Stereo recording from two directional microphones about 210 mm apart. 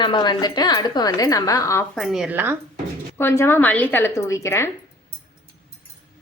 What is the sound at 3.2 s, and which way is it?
A woman's voice, 10° left (ahead or behind).